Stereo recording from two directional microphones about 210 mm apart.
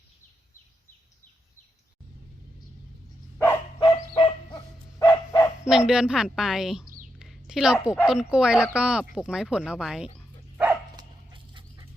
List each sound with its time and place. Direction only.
3.3 s bow-wow: 10° left (ahead or behind)
4.1 s bow-wow: 25° left (ahead or behind)
5.6 s a woman's voice: 5° right (ahead or behind)
6.8 s a sound: 40° right (ahead or behind)
7.2 s a sound: centre (ahead or behind)
8.0 s a woman's voice: 5° right (ahead or behind)
10.6 s dog: 15° right (ahead or behind)